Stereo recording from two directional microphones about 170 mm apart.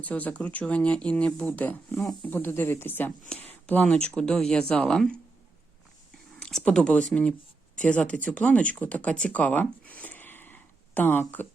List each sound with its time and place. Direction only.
0.0 s speech: 10° left (ahead or behind)
6.4 s a sound: 5° left (ahead or behind)
7.1 s speech: 5° left (ahead or behind)